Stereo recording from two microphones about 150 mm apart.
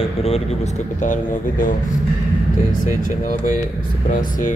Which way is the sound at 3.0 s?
60° left (ahead or behind).